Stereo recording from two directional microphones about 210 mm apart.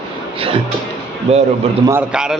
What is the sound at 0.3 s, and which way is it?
Speech, 25° right (ahead or behind).